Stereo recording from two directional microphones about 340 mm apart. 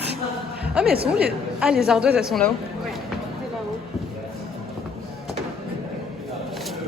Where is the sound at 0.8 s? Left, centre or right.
Right.